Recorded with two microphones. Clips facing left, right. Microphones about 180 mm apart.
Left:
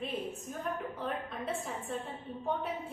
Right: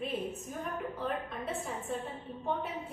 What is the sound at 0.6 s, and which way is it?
A woman's voice, centre (ahead or behind).